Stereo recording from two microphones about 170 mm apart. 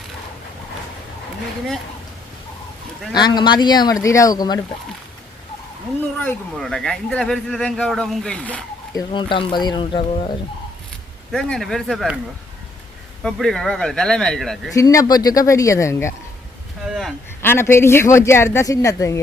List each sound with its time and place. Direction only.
3.1 s speech: 25° left (ahead or behind)
6.1 s speech: 5° left (ahead or behind)
8.9 s speech: 25° left (ahead or behind)
11.3 s speech: 5° left (ahead or behind)
13.2 s speech: 5° left (ahead or behind)
14.7 s speech: 20° left (ahead or behind)
16.9 s a sound: centre (ahead or behind)
17.4 s speech: 15° left (ahead or behind)